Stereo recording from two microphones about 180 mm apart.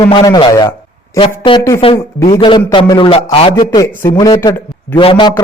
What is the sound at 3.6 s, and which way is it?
A man's voice, 20° left (ahead or behind).